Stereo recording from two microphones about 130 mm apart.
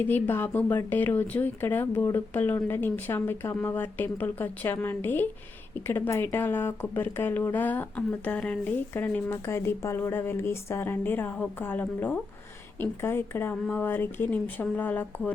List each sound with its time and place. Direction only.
0.0 s speech: 15° left (ahead or behind)